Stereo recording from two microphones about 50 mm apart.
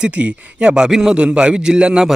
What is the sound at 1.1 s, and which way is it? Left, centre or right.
Speech, centre.